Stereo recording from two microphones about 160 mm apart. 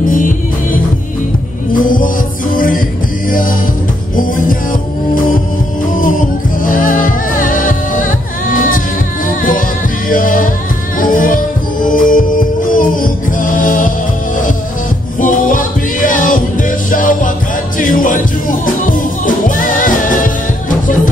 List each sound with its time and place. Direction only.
1.7 s music: 60° left (ahead or behind)
6.6 s music: 55° left (ahead or behind)
10.0 s music: 60° left (ahead or behind)
15.1 s music: 55° left (ahead or behind)